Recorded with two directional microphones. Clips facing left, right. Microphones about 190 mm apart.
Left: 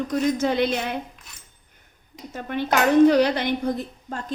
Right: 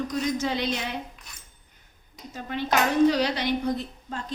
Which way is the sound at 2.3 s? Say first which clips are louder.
Left 3 dB; 55° left (ahead or behind).